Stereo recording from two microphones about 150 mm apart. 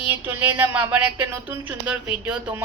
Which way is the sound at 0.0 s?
10° right (ahead or behind).